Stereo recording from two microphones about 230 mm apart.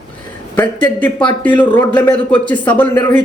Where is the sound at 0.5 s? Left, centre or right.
Centre.